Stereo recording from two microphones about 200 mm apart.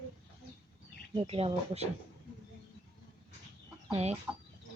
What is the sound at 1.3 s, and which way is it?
Speech, 30° right (ahead or behind).